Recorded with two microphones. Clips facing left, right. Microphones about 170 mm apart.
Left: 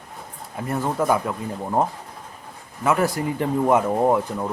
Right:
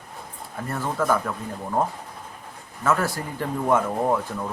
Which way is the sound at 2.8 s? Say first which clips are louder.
Left 3 dB; 15° left (ahead or behind).